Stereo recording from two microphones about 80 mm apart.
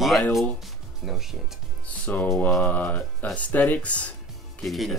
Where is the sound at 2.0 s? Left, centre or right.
Left.